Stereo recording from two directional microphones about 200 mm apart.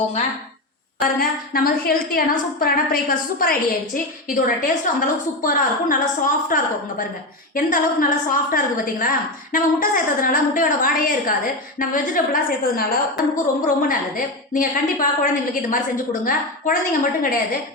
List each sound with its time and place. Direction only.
1.2 s a woman's voice: 45° left (ahead or behind)